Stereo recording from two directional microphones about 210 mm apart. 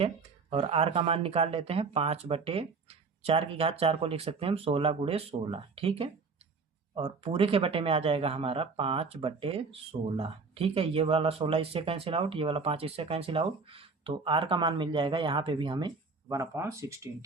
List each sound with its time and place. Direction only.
0.5 s speech: 30° right (ahead or behind)